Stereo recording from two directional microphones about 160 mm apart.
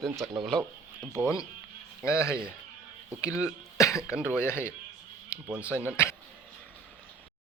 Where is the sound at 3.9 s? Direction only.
5° right (ahead or behind).